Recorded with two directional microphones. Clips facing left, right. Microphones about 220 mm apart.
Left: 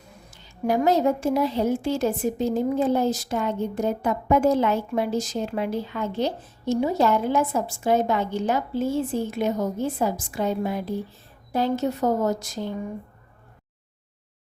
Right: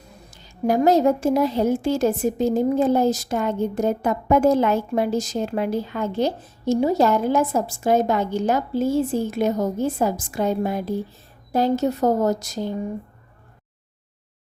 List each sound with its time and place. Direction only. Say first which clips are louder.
0.3 s a woman's voice: right 3 dB; 40° right (ahead or behind)